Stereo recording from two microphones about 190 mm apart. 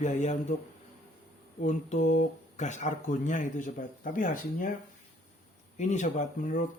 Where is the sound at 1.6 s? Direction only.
40° left (ahead or behind).